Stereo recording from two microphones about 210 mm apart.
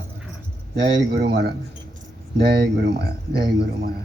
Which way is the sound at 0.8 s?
50° right (ahead or behind).